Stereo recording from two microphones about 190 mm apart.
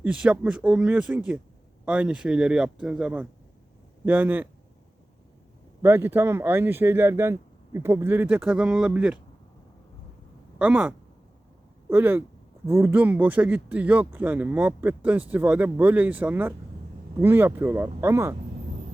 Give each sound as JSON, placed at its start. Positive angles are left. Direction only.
{"t": 0.0, "sound": "speech", "side_deg": -5}
{"t": 5.8, "sound": "speech", "side_deg": -10}
{"t": 10.6, "sound": "speech", "side_deg": -5}